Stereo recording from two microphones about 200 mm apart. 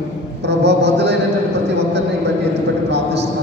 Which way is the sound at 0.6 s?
60° right (ahead or behind).